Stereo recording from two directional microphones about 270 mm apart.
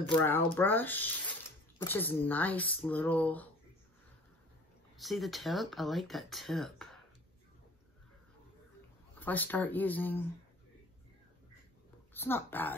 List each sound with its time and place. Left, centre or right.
0.1 s speech: centre
4.9 s speech: centre
9.2 s speech: centre
12.1 s speech: centre